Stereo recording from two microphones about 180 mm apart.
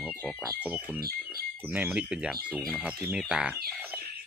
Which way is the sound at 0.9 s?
55° right (ahead or behind).